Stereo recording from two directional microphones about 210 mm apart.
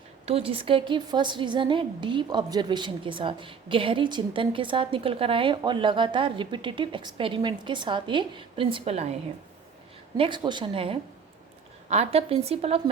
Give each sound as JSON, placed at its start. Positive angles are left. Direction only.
{"t": 0.3, "sound": "a woman's voice", "side_deg": -25}
{"t": 10.2, "sound": "a woman's voice", "side_deg": -20}